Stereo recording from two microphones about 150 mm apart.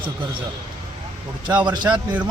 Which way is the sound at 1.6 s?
30° right (ahead or behind).